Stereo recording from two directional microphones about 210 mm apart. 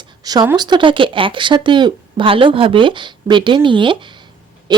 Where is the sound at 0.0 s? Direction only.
20° right (ahead or behind).